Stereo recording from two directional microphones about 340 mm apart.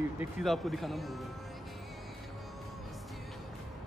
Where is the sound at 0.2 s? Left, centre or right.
Centre.